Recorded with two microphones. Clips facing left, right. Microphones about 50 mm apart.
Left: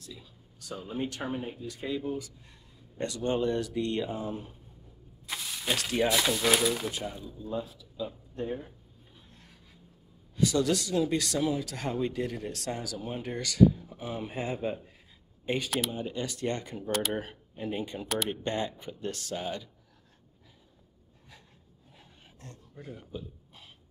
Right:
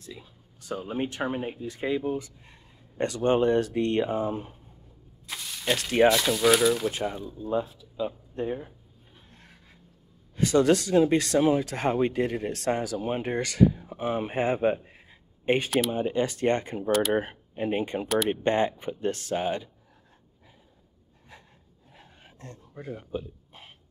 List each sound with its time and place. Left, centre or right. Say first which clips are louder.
0.0 s speech: right 4 dB; right
5.2 s a sound: right 3 dB; centre
6.0 s speech: right 6 dB; centre
6.9 s speech: right 6 dB; right
9.3 s a sound: right 3 dB; right
10.3 s speech: right 5 dB; right
18.0 s speech: right 6 dB; centre
18.3 s speech: right 8 dB; right
21.9 s a sound: right 5 dB; right